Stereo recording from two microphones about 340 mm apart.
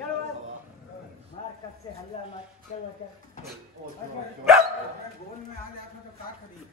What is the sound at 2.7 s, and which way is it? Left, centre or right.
Speech, left.